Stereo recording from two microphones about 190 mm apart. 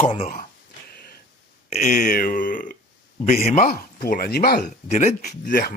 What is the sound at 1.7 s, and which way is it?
Speech, 45° left (ahead or behind).